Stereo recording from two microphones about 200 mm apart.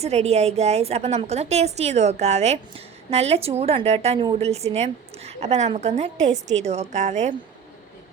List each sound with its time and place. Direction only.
0.0 s a woman's voice: 30° right (ahead or behind)